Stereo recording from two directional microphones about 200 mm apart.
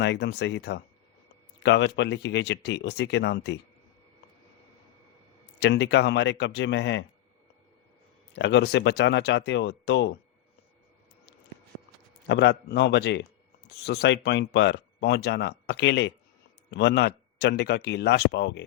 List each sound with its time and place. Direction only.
0.0 s speech: 60° left (ahead or behind)
5.5 s speech: 55° left (ahead or behind)
8.4 s speech: 60° left (ahead or behind)
12.3 s speech: 60° left (ahead or behind)